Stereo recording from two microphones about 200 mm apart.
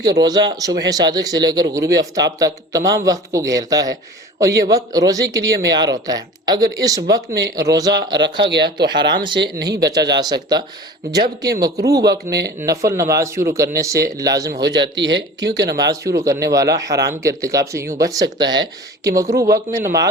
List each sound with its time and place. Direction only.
0.1 s a man's voice: 20° right (ahead or behind)
8.2 s speech: 60° right (ahead or behind)
9.0 s a man's voice: 20° right (ahead or behind)
9.4 s speech: 55° right (ahead or behind)
9.6 s a man's voice: 20° right (ahead or behind)
11.6 s speech: 15° right (ahead or behind)
12.3 s speech: 55° right (ahead or behind)
12.5 s speech: 15° right (ahead or behind)
14.6 s speech: 60° right (ahead or behind)
15.9 s speech: 15° right (ahead or behind)